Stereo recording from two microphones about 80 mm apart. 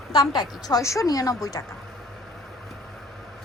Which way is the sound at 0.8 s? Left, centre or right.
Left.